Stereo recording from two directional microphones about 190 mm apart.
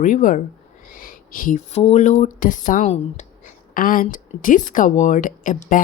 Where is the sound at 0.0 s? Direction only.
45° left (ahead or behind).